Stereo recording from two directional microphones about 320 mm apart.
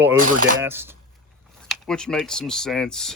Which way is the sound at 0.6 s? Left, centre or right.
Centre.